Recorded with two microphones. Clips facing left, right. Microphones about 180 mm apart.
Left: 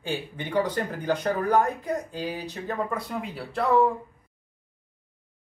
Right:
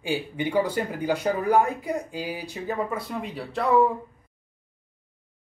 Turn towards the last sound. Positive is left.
turn(degrees=0)  # may be behind; listen again after turning